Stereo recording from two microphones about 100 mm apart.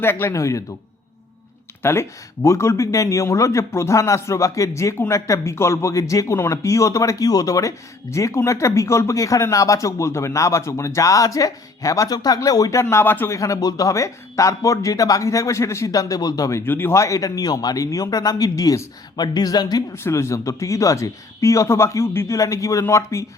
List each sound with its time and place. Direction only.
0.0 s a man's voice: 25° left (ahead or behind)
1.8 s speech: 25° left (ahead or behind)
19.9 s speech: 30° left (ahead or behind)